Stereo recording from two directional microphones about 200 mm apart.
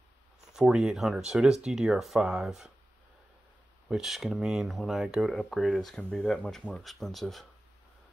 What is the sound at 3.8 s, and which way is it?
Speech, centre (ahead or behind).